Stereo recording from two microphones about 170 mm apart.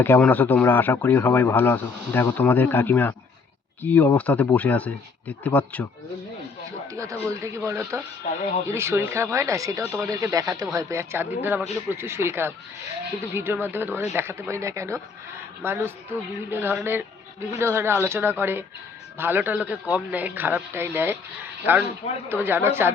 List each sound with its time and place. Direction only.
0.0 s speech: 10° left (ahead or behind)
6.9 s a sound: 20° right (ahead or behind)
7.3 s a woman's voice: 15° right (ahead or behind)